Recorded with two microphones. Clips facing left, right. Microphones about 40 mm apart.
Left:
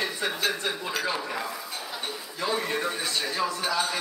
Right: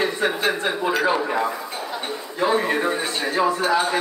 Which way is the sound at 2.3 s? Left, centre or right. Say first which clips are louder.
Right 8 dB; right.